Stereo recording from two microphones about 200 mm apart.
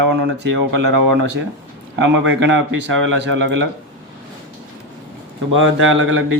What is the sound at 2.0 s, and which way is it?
Speech, 65° right (ahead or behind).